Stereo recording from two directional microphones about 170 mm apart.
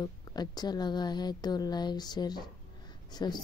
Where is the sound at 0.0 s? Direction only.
25° left (ahead or behind).